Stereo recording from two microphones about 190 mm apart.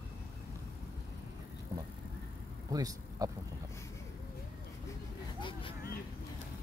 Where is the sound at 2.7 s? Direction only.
20° right (ahead or behind).